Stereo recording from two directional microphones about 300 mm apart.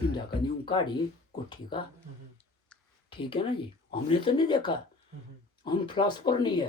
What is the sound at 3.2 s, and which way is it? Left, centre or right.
Speech, centre.